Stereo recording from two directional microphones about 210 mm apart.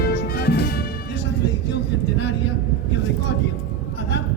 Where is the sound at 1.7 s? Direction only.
55° left (ahead or behind).